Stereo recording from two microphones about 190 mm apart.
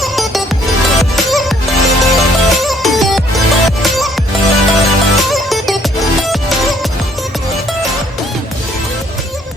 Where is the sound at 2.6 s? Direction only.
Centre (ahead or behind).